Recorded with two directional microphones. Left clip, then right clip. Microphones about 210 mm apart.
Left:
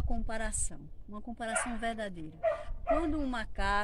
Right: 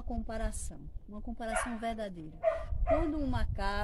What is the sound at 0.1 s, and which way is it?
Speech, 15° right (ahead or behind).